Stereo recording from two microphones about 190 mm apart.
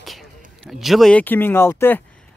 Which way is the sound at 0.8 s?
Centre (ahead or behind).